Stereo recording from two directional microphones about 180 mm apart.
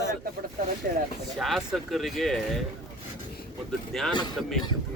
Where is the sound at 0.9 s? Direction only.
50° right (ahead or behind).